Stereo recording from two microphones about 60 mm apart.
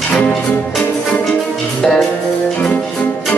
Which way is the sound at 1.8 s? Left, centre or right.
Centre.